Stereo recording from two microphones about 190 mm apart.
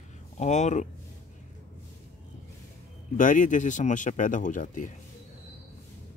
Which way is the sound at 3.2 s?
45° left (ahead or behind).